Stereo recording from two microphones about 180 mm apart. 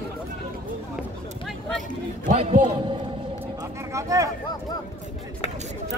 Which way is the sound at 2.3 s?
30° right (ahead or behind).